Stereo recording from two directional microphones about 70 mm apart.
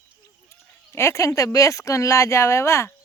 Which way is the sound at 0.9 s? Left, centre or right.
Left.